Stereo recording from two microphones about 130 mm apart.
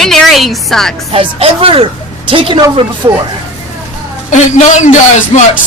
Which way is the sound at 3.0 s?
30° right (ahead or behind).